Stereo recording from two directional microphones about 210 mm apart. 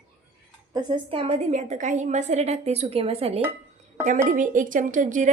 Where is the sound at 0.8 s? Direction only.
20° right (ahead or behind).